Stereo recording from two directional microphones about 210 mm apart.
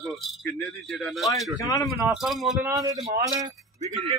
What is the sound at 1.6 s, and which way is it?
Speech, 15° left (ahead or behind).